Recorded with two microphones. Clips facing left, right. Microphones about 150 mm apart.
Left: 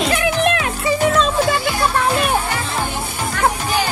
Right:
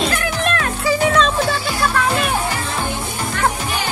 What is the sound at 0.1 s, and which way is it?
Music, 15° left (ahead or behind).